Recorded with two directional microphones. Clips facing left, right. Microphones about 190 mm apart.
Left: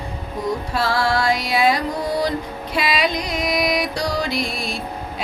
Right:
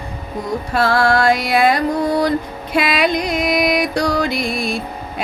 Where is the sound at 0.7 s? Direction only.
55° right (ahead or behind).